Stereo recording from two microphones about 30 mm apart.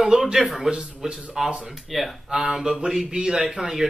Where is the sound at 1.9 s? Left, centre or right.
Centre.